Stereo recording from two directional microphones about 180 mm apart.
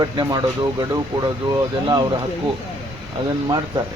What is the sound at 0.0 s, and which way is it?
Speech, 20° right (ahead or behind).